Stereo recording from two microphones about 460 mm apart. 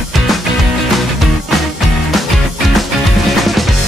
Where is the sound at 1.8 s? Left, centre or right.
Centre.